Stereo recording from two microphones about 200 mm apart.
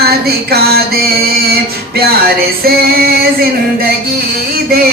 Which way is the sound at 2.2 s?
50° right (ahead or behind).